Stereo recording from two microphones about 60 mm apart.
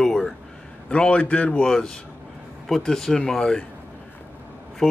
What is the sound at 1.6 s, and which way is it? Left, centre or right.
Speech, centre.